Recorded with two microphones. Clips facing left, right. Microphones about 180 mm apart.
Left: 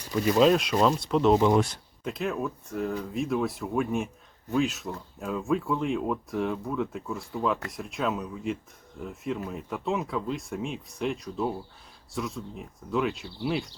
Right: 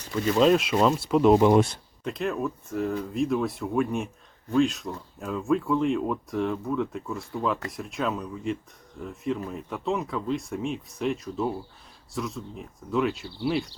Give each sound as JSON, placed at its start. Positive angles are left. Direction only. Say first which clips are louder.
{"t": 0.0, "sound": "speech", "louder": "left 1 dB", "side_deg": 10}
{"t": 0.4, "sound": "speech", "louder": "right 3 dB", "side_deg": 0}
{"t": 1.3, "sound": "speech", "louder": "right 3 dB", "side_deg": -15}
{"t": 2.0, "sound": "speech", "louder": "right 2 dB", "side_deg": 0}